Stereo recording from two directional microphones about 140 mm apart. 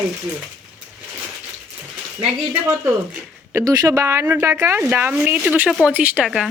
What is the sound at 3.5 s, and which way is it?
Speech, 25° right (ahead or behind).